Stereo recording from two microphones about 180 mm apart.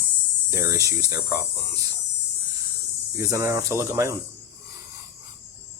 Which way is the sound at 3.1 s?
15° right (ahead or behind).